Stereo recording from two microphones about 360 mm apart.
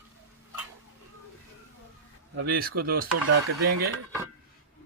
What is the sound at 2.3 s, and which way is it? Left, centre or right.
Speech, right.